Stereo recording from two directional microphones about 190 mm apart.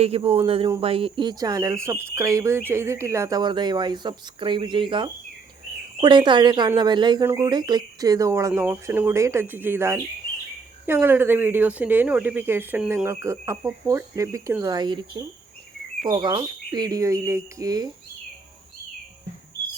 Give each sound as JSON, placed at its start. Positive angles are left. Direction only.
{"t": 0.0, "sound": "speech", "side_deg": -30}